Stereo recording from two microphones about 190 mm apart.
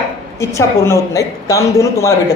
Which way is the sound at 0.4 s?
15° left (ahead or behind).